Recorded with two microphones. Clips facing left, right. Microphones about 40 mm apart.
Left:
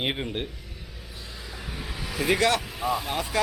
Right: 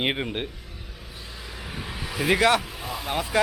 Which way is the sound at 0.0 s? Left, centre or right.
Centre.